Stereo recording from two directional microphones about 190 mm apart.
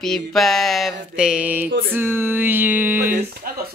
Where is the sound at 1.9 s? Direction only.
10° right (ahead or behind).